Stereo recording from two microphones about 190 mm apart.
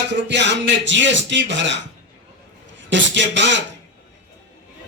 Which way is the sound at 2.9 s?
70° right (ahead or behind).